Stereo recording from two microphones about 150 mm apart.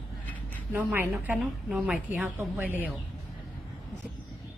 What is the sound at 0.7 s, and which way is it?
A woman's voice, 10° right (ahead or behind).